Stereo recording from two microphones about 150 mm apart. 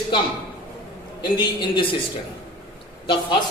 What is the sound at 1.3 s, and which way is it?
Speech, 30° left (ahead or behind).